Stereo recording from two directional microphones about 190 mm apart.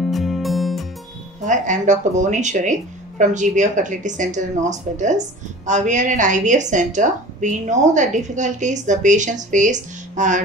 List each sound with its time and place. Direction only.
0.1 s music: centre (ahead or behind)
1.4 s a woman's voice: 40° right (ahead or behind)